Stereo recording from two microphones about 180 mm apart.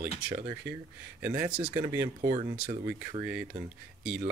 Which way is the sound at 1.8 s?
20° right (ahead or behind).